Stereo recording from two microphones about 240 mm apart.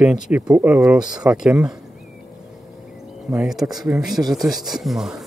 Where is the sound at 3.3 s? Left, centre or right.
Centre.